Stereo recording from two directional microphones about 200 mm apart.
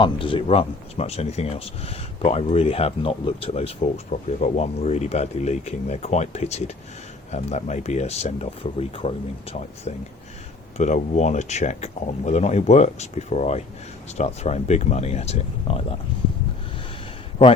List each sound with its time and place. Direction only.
0.0 s speech: 25° left (ahead or behind)